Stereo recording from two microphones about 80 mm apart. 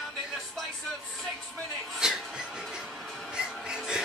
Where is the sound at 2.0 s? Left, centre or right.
Centre.